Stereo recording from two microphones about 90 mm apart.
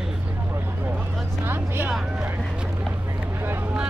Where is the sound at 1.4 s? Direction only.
25° right (ahead or behind).